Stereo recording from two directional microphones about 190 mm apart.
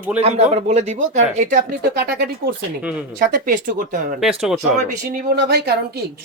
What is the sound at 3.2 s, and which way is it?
Speech, 45° right (ahead or behind).